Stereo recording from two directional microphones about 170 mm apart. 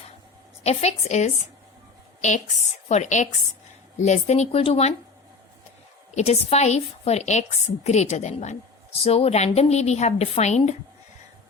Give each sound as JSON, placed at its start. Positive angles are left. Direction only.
{"t": 0.6, "sound": "a woman's voice", "side_deg": 40}
{"t": 6.1, "sound": "speech", "side_deg": 40}